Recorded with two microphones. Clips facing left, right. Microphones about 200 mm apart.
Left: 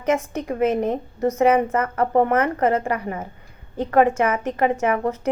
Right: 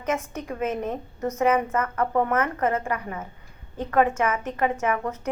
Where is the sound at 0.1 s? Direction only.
30° left (ahead or behind).